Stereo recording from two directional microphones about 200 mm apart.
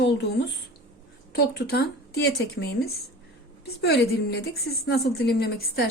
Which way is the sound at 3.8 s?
55° left (ahead or behind).